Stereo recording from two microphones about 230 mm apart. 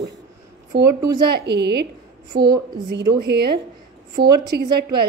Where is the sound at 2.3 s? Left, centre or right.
Centre.